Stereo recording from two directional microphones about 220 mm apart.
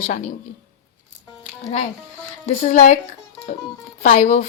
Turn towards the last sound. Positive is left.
turn(degrees=35)  # may be behind; listen again after turning